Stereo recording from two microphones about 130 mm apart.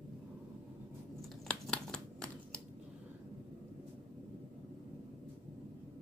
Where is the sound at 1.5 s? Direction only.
5° left (ahead or behind).